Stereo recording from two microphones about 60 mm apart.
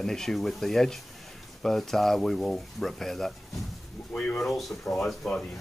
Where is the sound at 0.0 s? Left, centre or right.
Centre.